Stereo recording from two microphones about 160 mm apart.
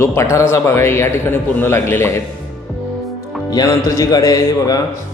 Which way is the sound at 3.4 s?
25° left (ahead or behind).